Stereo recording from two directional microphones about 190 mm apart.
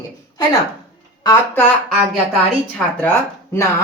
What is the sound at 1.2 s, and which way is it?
Speech, 20° left (ahead or behind).